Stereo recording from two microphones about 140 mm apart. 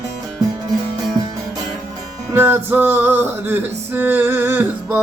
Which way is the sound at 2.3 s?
15° right (ahead or behind).